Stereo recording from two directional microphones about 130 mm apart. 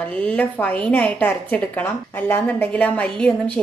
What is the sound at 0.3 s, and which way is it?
A woman's voice, 10° left (ahead or behind).